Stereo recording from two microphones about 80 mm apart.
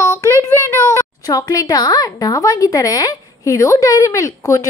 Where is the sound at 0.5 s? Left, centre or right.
Left.